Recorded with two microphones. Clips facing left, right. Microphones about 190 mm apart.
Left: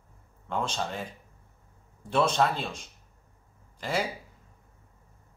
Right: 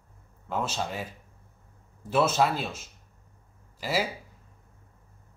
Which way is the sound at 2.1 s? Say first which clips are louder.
Right 1 dB; 5° right (ahead or behind).